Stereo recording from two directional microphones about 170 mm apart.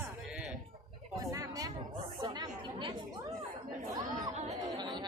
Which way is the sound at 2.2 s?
25° right (ahead or behind).